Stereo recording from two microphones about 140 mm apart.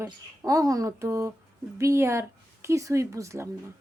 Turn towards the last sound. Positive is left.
turn(degrees=-20)  # may be behind; listen again after turning